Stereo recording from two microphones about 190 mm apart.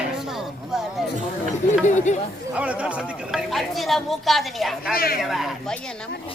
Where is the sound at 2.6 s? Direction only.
5° right (ahead or behind).